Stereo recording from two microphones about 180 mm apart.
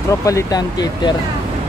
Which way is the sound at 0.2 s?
20° left (ahead or behind).